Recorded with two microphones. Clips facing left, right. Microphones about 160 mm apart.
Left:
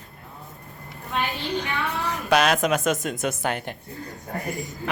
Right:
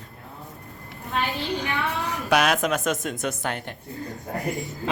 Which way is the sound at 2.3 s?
5° right (ahead or behind).